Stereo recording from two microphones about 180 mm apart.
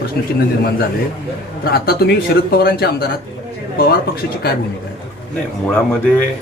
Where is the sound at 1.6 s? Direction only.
55° left (ahead or behind).